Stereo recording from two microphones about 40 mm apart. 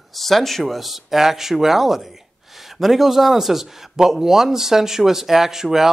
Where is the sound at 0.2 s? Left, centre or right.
Centre.